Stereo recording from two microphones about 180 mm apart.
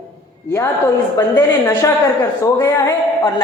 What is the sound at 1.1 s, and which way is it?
A woman's voice, 20° left (ahead or behind).